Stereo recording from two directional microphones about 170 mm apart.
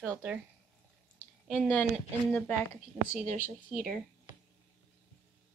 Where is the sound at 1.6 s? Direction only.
10° left (ahead or behind).